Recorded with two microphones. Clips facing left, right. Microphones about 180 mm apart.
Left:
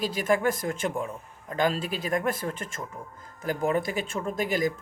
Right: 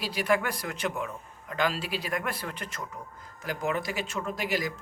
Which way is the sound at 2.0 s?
45° left (ahead or behind).